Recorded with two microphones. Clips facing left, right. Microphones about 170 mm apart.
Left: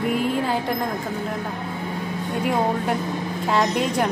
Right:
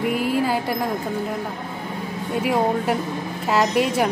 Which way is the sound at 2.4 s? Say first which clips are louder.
Right 2 dB; 5° right (ahead or behind).